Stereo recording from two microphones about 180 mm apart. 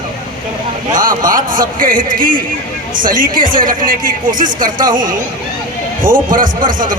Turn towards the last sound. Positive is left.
turn(degrees=-50)  # may be behind; listen again after turning